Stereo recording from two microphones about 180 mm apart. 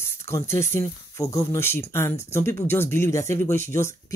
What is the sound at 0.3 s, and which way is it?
Speech, 15° left (ahead or behind).